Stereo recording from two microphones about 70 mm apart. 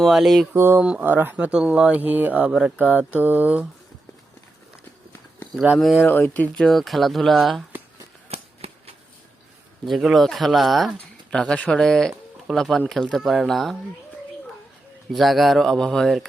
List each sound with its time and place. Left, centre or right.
0.0 s speech: centre
0.5 s a sound: right
0.8 s speech: right
2.5 s speech: centre
2.7 s speech: right
6.0 s speech: left
6.6 s speech: centre
9.8 s speech: centre
10.9 s speech: centre
15.1 s speech: centre